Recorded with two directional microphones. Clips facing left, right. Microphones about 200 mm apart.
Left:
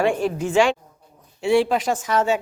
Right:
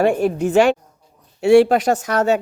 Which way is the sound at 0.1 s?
50° right (ahead or behind).